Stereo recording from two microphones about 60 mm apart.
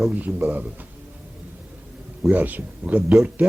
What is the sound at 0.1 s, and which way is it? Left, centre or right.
Speech, right.